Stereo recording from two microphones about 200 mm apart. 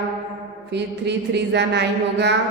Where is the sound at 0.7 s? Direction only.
60° right (ahead or behind).